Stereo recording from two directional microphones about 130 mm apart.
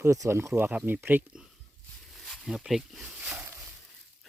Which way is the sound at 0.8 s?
5° right (ahead or behind).